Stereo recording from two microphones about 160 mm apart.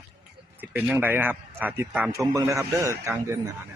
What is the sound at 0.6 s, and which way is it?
A man's voice, 10° right (ahead or behind).